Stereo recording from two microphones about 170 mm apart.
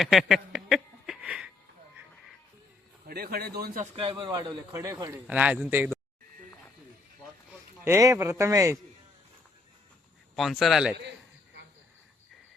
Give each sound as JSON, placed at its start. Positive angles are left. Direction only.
{"t": 0.0, "sound": "a sound", "side_deg": 0}
{"t": 3.1, "sound": "speech", "side_deg": -65}
{"t": 3.9, "sound": "a man's voice", "side_deg": -30}
{"t": 7.9, "sound": "a man's voice", "side_deg": -15}
{"t": 10.3, "sound": "speech", "side_deg": 0}